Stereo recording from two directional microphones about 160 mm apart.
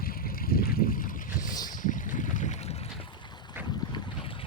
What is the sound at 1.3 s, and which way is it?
Boat, 25° left (ahead or behind).